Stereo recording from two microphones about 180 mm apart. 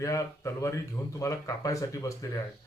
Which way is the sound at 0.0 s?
15° left (ahead or behind).